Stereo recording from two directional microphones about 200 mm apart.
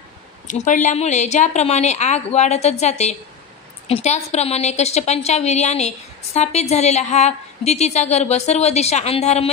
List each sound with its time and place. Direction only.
0.5 s a woman's voice: 40° left (ahead or behind)